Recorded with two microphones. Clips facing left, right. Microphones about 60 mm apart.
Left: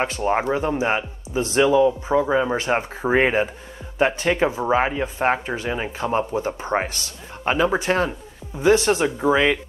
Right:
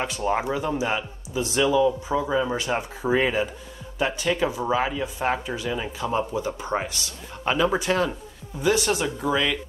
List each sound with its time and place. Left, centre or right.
0.0 s a man's voice: left